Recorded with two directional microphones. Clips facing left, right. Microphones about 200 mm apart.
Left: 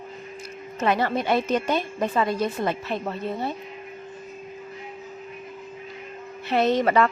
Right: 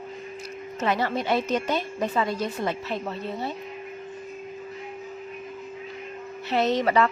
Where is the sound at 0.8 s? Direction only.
55° left (ahead or behind).